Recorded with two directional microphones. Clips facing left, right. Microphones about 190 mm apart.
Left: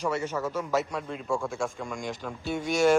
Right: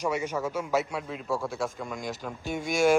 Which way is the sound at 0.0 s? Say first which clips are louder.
Even; 15° right (ahead or behind).